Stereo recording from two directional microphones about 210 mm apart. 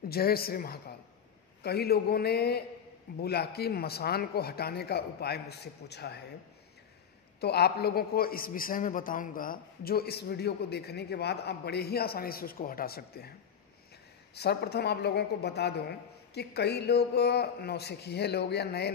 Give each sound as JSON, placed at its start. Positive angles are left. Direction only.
{"t": 0.1, "sound": "a man's voice", "side_deg": 45}
{"t": 7.3, "sound": "a man's voice", "side_deg": 50}
{"t": 14.3, "sound": "a man's voice", "side_deg": 50}